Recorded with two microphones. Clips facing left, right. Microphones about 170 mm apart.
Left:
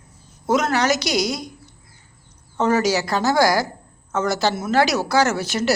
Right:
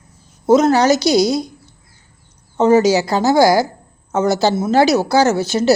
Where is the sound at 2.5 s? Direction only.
25° right (ahead or behind).